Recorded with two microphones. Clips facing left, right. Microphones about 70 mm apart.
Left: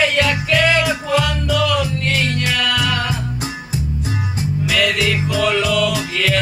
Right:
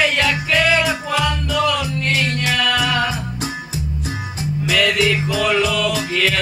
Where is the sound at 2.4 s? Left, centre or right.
Centre.